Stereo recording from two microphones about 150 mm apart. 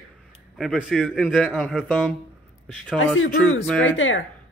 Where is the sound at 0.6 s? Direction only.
Centre (ahead or behind).